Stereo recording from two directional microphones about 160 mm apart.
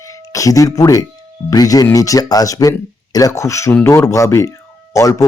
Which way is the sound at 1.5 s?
20° left (ahead or behind).